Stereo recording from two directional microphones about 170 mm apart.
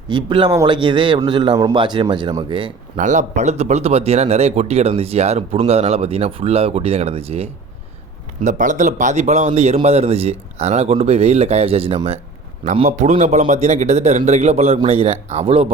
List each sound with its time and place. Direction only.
0.1 s a man's voice: 25° right (ahead or behind)
2.9 s speech: 45° right (ahead or behind)
8.4 s speech: 50° right (ahead or behind)
12.8 s speech: 45° right (ahead or behind)